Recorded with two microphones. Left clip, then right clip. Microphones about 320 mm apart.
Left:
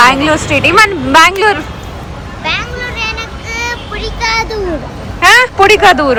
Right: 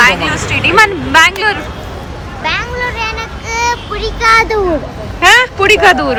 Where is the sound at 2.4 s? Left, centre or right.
Right.